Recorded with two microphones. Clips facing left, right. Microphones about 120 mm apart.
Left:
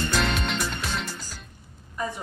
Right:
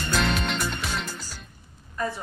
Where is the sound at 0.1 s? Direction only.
Centre (ahead or behind).